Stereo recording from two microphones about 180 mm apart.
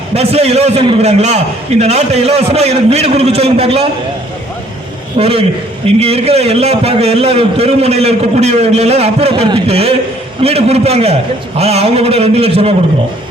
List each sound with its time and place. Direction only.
0.1 s a man's voice: 35° right (ahead or behind)
5.1 s a man's voice: 30° right (ahead or behind)